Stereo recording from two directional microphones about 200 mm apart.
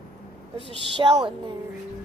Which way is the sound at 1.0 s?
25° right (ahead or behind).